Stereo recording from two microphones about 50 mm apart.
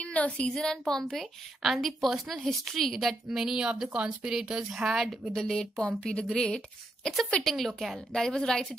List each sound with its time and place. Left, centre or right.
0.0 s a woman's voice: left
0.6 s a woman's voice: centre
1.1 s a woman's voice: centre
3.3 s speech: centre
5.3 s a woman's voice: centre
8.1 s a woman's voice: centre